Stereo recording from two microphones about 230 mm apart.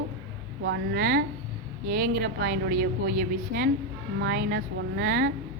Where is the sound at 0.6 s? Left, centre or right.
Right.